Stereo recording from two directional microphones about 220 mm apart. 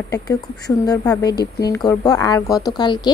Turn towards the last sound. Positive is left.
turn(degrees=20)  # may be behind; listen again after turning